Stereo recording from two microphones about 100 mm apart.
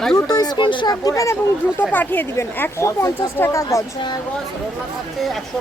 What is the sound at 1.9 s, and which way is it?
Speech, 15° left (ahead or behind).